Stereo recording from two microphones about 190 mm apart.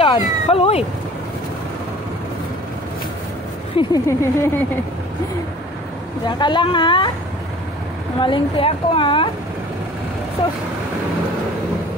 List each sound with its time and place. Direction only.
0.0 s speech: 30° left (ahead or behind)
3.7 s speech: 15° left (ahead or behind)
6.2 s a woman's voice: 25° left (ahead or behind)
8.2 s a woman's voice: 25° left (ahead or behind)